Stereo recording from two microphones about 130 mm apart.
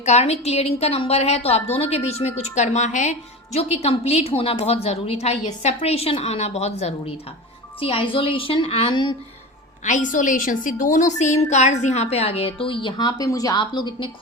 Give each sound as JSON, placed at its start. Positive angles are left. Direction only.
{"t": 0.0, "sound": "a woman's voice", "side_deg": 55}
{"t": 2.4, "sound": "a woman's voice", "side_deg": 65}
{"t": 7.8, "sound": "a woman's voice", "side_deg": 45}
{"t": 9.8, "sound": "a woman's voice", "side_deg": 75}